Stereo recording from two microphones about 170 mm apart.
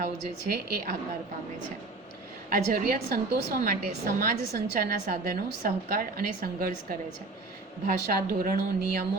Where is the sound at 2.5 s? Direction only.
55° right (ahead or behind).